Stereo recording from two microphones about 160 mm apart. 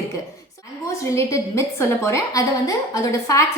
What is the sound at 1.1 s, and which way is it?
A woman's voice, 15° left (ahead or behind).